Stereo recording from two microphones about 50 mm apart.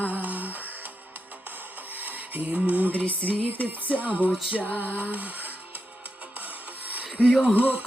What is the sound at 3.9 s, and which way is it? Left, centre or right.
Music, right.